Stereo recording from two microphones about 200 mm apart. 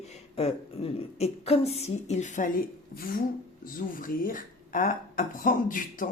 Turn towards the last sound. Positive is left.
turn(degrees=45)  # may be behind; listen again after turning